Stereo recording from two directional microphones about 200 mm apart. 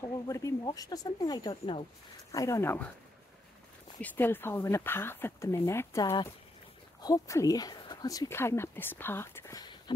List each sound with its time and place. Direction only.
0.0 s speech: 15° left (ahead or behind)
4.0 s speech: 10° left (ahead or behind)